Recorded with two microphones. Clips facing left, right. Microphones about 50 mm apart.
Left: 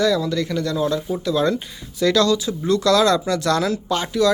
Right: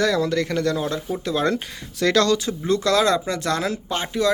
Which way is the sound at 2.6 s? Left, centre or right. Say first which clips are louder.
Left 3 dB; right.